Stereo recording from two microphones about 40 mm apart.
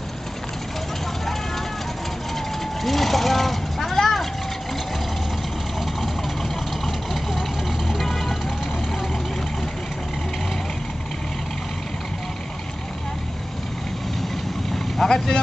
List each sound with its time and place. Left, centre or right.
2.8 s vehicle: centre
7.9 s music: centre
15.0 s vehicle: centre